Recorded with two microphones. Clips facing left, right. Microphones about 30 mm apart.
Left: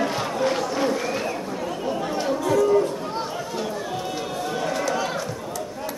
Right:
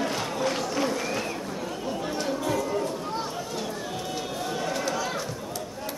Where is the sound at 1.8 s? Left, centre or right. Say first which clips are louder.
Left 5 dB; centre.